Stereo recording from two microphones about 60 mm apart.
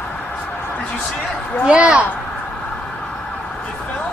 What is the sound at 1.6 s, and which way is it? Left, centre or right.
Speech, centre.